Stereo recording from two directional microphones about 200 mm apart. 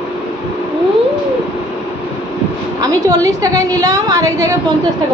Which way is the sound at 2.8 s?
15° right (ahead or behind).